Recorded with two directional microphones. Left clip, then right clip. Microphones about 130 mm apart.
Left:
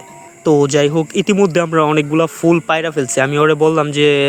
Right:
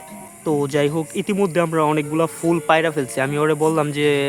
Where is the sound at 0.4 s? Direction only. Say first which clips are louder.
Left 7 dB; 35° left (ahead or behind).